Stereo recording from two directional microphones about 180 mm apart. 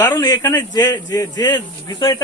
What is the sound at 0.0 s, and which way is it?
A man's voice, 20° left (ahead or behind).